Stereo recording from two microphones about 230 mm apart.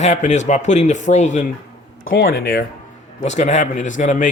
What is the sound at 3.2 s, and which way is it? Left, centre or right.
Speech, left.